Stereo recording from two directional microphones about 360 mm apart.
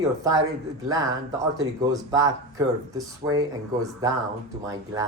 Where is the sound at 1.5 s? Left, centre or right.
Centre.